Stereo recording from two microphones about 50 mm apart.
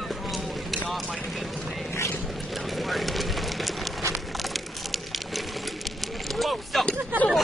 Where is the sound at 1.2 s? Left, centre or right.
Centre.